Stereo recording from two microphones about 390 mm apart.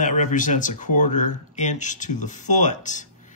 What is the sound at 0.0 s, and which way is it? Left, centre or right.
Speech, centre.